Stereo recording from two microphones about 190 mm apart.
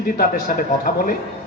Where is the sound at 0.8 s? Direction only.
50° left (ahead or behind).